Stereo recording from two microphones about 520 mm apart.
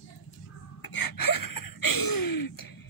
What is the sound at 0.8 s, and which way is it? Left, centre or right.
Gasp, left.